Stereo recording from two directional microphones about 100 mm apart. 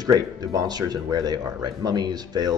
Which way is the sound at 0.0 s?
40° right (ahead or behind).